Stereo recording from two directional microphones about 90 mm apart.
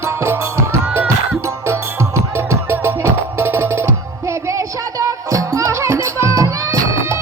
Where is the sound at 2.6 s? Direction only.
30° right (ahead or behind).